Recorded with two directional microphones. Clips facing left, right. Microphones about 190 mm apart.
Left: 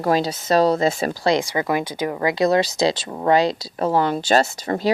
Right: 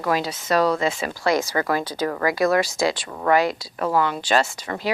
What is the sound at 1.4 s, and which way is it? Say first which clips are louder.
Speech: left 1 dB; 15° left (ahead or behind).